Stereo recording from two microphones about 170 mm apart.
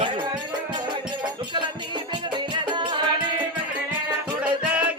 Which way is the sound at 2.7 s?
25° right (ahead or behind).